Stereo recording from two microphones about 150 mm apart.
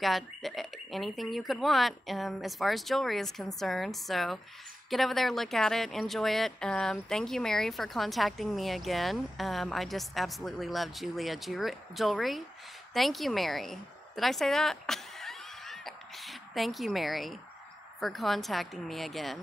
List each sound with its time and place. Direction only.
0.0 s speech: centre (ahead or behind)
12.9 s a sound: centre (ahead or behind)
18.0 s speech: centre (ahead or behind)